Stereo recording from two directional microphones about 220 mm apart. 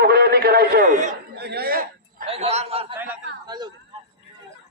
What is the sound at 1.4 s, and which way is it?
Speech, 45° right (ahead or behind).